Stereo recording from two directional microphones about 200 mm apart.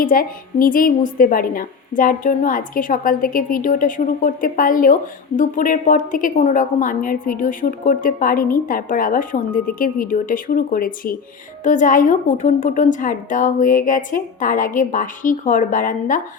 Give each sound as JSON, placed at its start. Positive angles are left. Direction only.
{"t": 0.0, "sound": "a woman's voice", "side_deg": 45}